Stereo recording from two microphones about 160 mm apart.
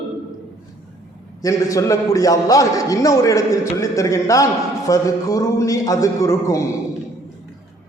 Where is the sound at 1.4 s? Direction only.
20° left (ahead or behind).